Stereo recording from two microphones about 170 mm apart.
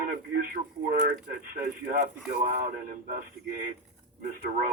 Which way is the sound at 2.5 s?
55° right (ahead or behind).